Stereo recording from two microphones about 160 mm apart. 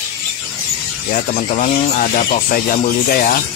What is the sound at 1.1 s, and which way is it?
Speech, 50° left (ahead or behind).